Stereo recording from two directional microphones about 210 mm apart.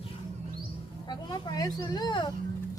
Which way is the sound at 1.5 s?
20° left (ahead or behind).